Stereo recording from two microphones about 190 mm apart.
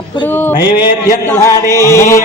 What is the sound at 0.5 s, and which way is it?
Speech, 25° left (ahead or behind).